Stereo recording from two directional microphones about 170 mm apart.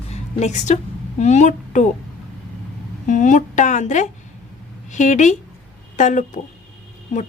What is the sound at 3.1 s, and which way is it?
A woman's voice, 45° left (ahead or behind).